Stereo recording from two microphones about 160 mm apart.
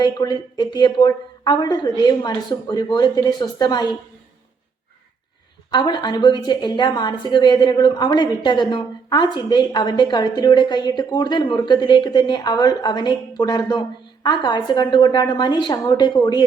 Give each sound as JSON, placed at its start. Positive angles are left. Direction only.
{"t": 0.0, "sound": "a woman's voice", "side_deg": 25}
{"t": 5.7, "sound": "a woman's voice", "side_deg": 30}